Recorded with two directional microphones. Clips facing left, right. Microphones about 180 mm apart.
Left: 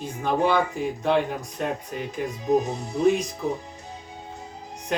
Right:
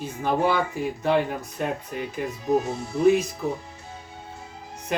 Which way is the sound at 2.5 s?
15° left (ahead or behind).